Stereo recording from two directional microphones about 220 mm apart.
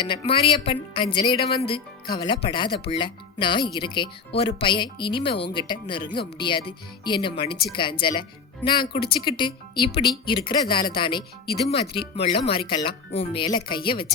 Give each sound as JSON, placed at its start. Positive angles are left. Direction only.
{"t": 0.0, "sound": "speech", "side_deg": 25}
{"t": 1.4, "sound": "speech", "side_deg": 45}
{"t": 1.7, "sound": "speech", "side_deg": 20}